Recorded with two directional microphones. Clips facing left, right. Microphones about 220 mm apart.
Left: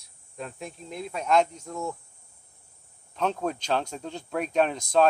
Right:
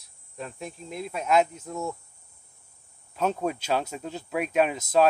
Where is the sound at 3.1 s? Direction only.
5° right (ahead or behind).